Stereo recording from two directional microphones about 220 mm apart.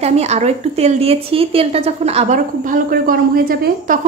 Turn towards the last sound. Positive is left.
turn(degrees=-40)  # may be behind; listen again after turning